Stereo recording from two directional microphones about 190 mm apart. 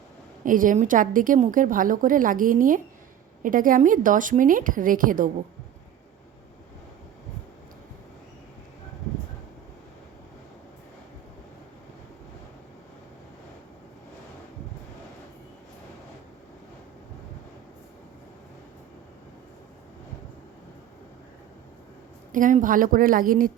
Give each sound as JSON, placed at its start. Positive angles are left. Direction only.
{"t": 0.4, "sound": "a woman's voice", "side_deg": -45}
{"t": 22.3, "sound": "a woman's voice", "side_deg": -45}